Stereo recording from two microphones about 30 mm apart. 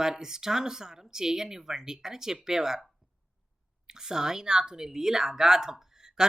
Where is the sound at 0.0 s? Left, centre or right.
Centre.